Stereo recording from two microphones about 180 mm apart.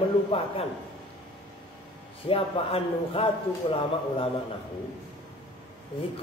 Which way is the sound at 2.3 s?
30° left (ahead or behind).